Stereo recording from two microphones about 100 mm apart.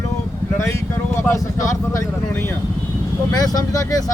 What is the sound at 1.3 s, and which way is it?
Speech, 30° left (ahead or behind).